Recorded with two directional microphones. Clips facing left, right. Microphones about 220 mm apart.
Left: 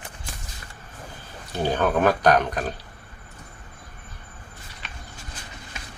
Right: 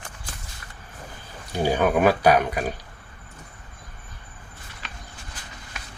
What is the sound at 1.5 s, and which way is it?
Speech, 10° right (ahead or behind).